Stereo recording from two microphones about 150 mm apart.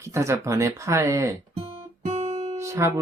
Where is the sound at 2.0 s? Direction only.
45° right (ahead or behind).